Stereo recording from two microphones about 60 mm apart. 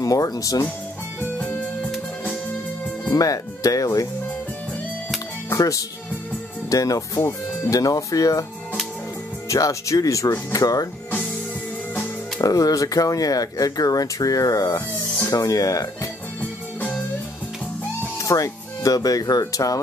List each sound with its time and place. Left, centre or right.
0.0 s speech: left
3.2 s speech: left
5.5 s speech: left
7.7 s speech: left
9.5 s speech: left
12.4 s speech: left
18.2 s speech: left